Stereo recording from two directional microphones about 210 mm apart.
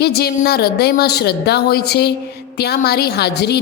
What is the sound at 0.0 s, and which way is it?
A woman's voice, 50° left (ahead or behind).